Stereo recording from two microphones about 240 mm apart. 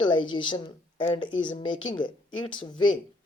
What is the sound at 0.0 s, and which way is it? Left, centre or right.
A woman's voice, centre.